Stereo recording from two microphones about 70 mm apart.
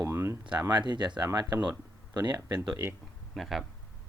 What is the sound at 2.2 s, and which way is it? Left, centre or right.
Speech, right.